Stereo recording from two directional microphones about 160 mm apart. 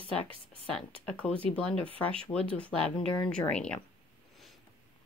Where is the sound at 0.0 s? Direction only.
35° right (ahead or behind).